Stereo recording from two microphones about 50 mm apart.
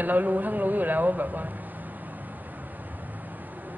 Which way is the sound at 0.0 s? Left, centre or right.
Right.